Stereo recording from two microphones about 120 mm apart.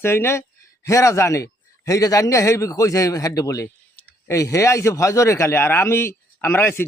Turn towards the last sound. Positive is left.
turn(degrees=20)  # may be behind; listen again after turning